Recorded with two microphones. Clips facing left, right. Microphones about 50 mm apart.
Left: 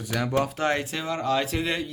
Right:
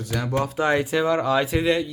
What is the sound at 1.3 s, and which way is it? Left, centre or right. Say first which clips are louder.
Speech: right 4 dB; centre.